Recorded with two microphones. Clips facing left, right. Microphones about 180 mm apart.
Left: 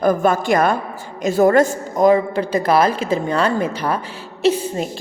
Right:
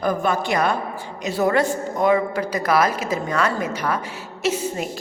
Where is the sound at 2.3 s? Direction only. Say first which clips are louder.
Left 4 dB; 30° left (ahead or behind).